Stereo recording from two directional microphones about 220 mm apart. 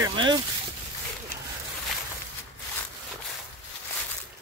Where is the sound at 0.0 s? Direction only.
20° right (ahead or behind).